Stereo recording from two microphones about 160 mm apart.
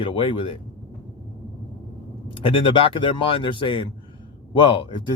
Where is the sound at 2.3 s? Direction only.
30° left (ahead or behind).